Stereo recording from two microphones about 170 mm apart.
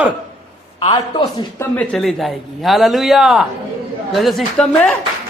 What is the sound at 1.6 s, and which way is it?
A man's voice, 10° left (ahead or behind).